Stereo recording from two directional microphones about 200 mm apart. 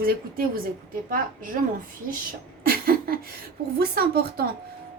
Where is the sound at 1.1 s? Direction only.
45° right (ahead or behind).